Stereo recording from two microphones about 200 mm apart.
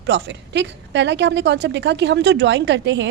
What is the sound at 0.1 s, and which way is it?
A woman's voice, 60° right (ahead or behind).